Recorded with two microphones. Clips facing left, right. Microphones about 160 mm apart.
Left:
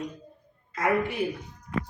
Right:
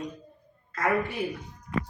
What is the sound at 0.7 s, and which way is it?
Speech, 15° left (ahead or behind).